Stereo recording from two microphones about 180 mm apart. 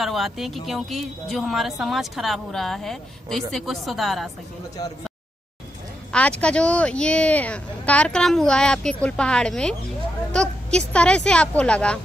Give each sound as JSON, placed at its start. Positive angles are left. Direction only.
{"t": 0.0, "sound": "a woman's voice", "side_deg": 0}
{"t": 6.1, "sound": "a woman's voice", "side_deg": 5}